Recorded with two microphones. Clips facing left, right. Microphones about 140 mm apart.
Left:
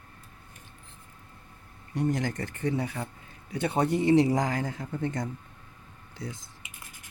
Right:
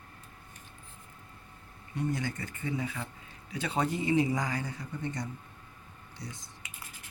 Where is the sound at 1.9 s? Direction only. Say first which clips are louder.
Left 5 dB; 90° left.